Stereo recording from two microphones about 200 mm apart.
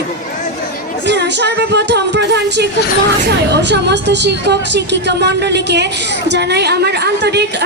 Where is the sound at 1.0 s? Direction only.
60° right (ahead or behind).